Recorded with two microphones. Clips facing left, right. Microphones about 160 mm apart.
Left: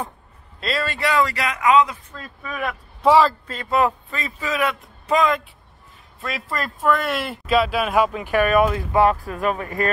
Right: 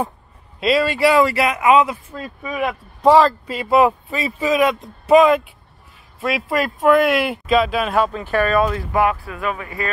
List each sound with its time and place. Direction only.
0.6 s speech: 5° right (ahead or behind)
3.0 s speech: 5° left (ahead or behind)
3.4 s speech: 10° right (ahead or behind); by 9.0 s 20° left (ahead or behind)
9.0 s speech: 40° left (ahead or behind)